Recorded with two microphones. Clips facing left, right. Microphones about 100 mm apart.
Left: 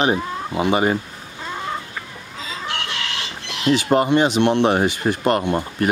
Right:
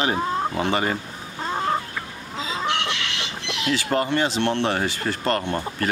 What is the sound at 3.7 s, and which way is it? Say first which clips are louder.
Speech: left 7 dB; 20° left (ahead or behind).